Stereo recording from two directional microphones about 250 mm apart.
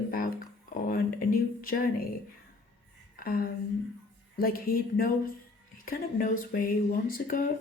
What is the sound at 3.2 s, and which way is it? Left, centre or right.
Speech, left.